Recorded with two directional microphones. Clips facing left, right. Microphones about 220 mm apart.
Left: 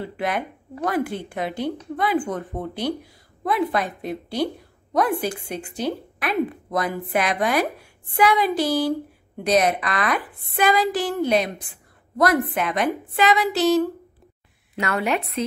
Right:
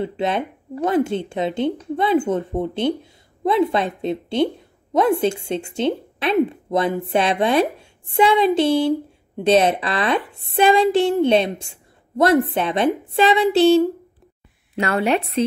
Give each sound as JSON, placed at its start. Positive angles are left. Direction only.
{"t": 0.0, "sound": "speech", "side_deg": -25}